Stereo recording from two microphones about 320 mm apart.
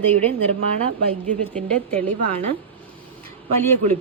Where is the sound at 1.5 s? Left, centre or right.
Centre.